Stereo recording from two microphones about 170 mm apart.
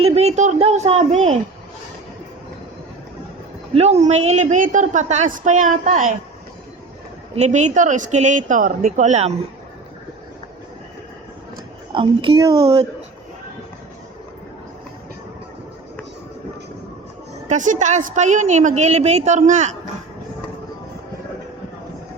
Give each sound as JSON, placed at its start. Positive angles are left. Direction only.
{"t": 0.0, "sound": "speech", "side_deg": -40}
{"t": 3.8, "sound": "a woman's voice", "side_deg": -40}
{"t": 7.3, "sound": "a woman's voice", "side_deg": -45}
{"t": 11.9, "sound": "a woman's voice", "side_deg": -30}
{"t": 17.5, "sound": "a woman's voice", "side_deg": -45}